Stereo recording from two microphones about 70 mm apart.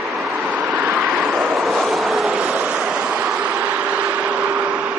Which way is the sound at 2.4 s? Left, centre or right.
Centre.